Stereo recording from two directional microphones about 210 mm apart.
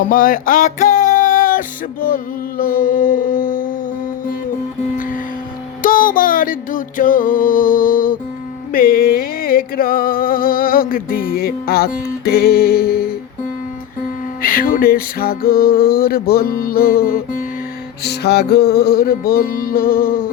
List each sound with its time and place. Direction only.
0.0 s music: 40° left (ahead or behind)
4.9 s music: 40° left (ahead or behind)
14.4 s music: 40° left (ahead or behind)